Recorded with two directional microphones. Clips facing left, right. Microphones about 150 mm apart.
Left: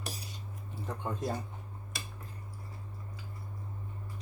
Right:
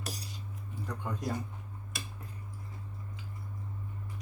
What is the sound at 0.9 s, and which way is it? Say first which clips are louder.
Speech: left 2 dB; 25° left (ahead or behind).